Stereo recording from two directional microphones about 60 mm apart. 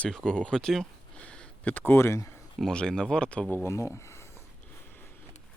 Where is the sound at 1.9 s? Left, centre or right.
Left.